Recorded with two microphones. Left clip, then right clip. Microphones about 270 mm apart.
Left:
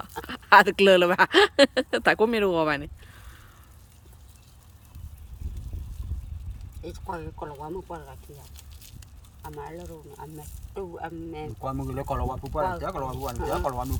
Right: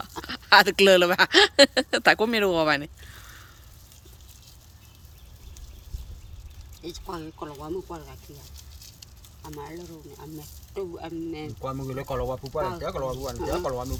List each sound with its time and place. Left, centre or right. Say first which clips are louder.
0.2 s speech: left 1 dB; centre
7.1 s speech: left 3 dB; centre
10.8 s speech: right 2 dB; centre